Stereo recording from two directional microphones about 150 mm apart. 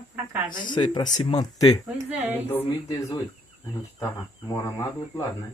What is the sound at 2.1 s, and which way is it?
Speech, 10° right (ahead or behind).